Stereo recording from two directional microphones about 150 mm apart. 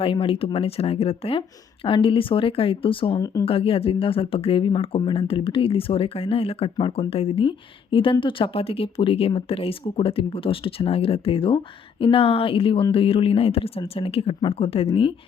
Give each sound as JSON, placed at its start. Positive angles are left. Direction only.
{"t": 0.0, "sound": "speech", "side_deg": 35}